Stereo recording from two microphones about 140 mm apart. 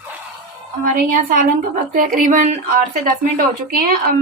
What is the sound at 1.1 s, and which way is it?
Speech, 70° right (ahead or behind).